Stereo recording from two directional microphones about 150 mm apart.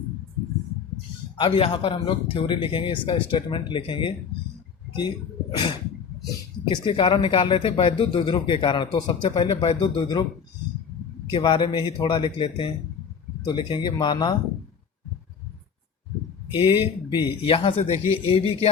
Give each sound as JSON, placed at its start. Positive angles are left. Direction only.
{"t": 1.4, "sound": "speech", "side_deg": 40}
{"t": 11.3, "sound": "speech", "side_deg": 35}
{"t": 16.6, "sound": "speech", "side_deg": 35}